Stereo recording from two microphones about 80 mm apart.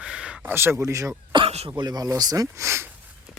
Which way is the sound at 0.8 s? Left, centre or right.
Right.